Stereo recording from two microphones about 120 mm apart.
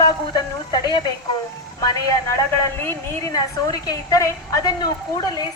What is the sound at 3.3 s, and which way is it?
A woman's voice, 30° left (ahead or behind).